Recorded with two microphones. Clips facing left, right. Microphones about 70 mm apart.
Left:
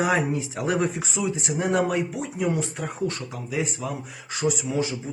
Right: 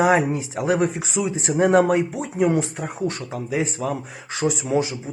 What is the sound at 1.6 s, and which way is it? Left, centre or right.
Speech, right.